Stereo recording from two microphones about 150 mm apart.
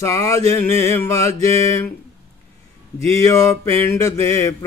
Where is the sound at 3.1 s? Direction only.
20° left (ahead or behind).